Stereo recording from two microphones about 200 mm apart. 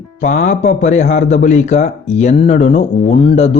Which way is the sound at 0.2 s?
40° left (ahead or behind).